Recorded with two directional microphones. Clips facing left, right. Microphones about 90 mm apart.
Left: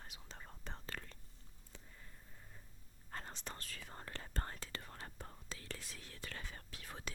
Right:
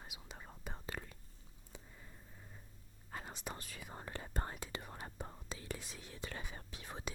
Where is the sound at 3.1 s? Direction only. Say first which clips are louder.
Right 2 dB; 5° right (ahead or behind).